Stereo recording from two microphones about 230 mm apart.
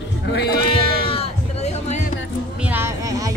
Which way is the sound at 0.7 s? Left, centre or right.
Left.